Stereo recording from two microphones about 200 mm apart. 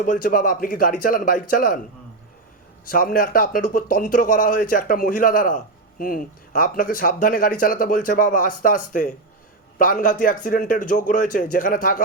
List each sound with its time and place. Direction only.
0.0 s a man's voice: 40° left (ahead or behind)
2.8 s a man's voice: 45° left (ahead or behind)